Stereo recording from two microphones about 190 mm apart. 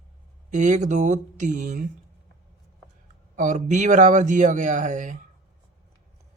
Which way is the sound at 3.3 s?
40° right (ahead or behind).